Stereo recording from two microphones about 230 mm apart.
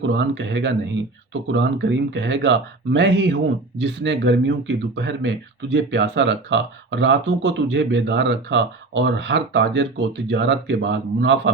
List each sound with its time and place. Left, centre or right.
0.0 s speech: right